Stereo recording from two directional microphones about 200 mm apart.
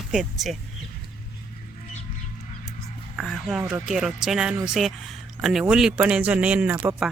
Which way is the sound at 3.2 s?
Centre (ahead or behind).